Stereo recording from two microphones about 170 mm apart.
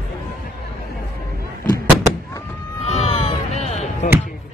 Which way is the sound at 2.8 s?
40° left (ahead or behind).